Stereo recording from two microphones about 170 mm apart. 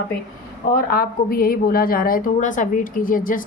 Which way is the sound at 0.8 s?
65° left (ahead or behind).